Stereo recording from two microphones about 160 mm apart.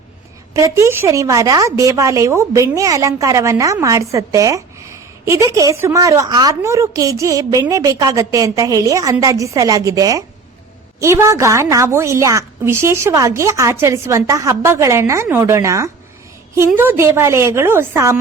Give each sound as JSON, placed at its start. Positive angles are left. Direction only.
{"t": 0.5, "sound": "a woman's voice", "side_deg": -20}